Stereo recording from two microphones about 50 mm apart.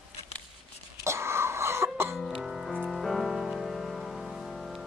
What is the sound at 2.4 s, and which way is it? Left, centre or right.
Music, centre.